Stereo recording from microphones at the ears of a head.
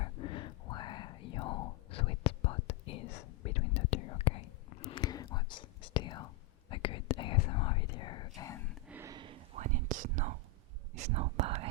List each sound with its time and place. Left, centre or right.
0.0 s whispering: left
8.4 s a sound: left
9.0 s whispering: right